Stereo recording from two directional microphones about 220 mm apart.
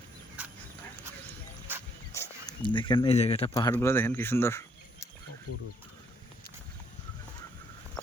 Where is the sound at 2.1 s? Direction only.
15° left (ahead or behind).